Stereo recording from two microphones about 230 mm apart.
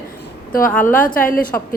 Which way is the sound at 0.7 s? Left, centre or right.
Centre.